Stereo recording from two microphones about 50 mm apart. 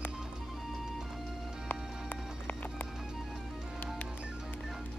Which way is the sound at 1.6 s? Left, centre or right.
Left.